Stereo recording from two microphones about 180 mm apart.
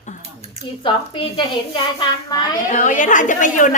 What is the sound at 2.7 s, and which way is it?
A woman's voice, 45° left (ahead or behind).